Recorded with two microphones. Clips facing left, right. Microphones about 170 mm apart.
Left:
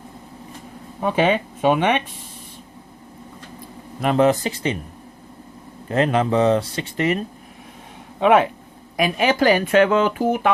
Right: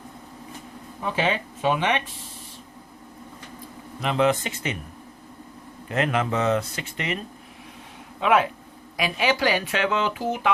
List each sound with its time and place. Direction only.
1.0 s speech: 55° left (ahead or behind)
4.0 s speech: 45° left (ahead or behind)
5.9 s speech: 30° left (ahead or behind)
9.0 s speech: 50° left (ahead or behind)